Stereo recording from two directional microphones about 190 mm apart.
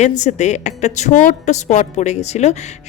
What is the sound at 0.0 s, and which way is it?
A woman's voice, 40° left (ahead or behind).